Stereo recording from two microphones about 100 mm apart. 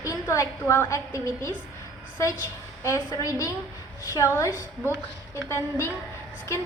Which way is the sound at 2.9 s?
35° left (ahead or behind).